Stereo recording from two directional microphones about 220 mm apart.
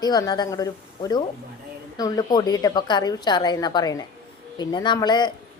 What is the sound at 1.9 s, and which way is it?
Speech, 15° left (ahead or behind).